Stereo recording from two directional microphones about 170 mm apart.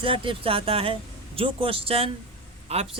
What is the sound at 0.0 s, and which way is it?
Speech, 30° right (ahead or behind).